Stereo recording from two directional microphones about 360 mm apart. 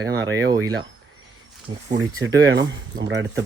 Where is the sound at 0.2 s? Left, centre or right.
Right.